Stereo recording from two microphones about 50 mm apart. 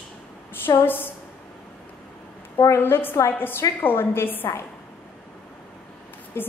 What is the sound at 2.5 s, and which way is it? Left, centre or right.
Speech, left.